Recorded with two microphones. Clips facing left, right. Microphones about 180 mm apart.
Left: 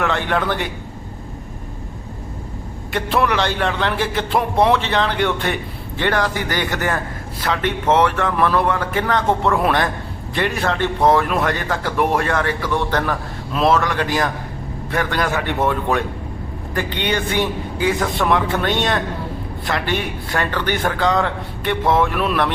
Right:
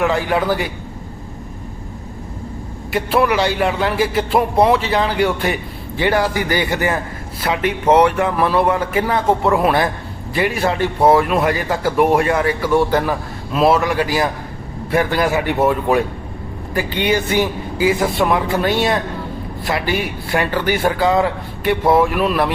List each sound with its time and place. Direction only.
0.0 s a man's voice: 5° right (ahead or behind)
2.9 s speech: 5° right (ahead or behind)